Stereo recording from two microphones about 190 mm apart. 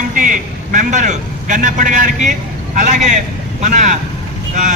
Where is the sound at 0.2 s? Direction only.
45° right (ahead or behind).